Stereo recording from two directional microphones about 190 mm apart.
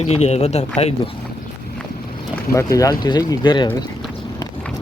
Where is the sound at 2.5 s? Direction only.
15° left (ahead or behind).